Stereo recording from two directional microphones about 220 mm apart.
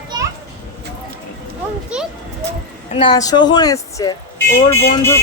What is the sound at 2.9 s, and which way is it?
Speech, 20° left (ahead or behind).